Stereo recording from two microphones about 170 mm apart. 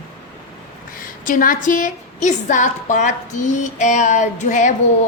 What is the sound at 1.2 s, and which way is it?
A woman's voice, 50° left (ahead or behind).